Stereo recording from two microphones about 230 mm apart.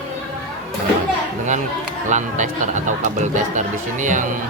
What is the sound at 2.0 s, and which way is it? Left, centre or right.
Speech, right.